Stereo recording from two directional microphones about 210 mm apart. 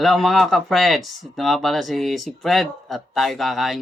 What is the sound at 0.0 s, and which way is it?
Speech, centre (ahead or behind).